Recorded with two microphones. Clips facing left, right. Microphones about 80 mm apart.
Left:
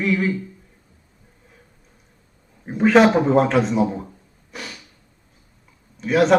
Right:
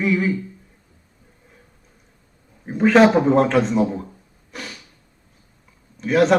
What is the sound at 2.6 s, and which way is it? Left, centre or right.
Speech, centre.